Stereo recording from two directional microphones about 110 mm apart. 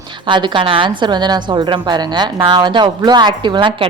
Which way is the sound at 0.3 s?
45° right (ahead or behind).